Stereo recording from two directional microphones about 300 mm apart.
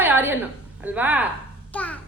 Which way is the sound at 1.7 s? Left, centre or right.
Centre.